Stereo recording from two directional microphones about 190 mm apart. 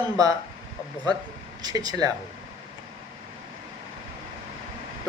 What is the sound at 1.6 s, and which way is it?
Speech, 20° right (ahead or behind).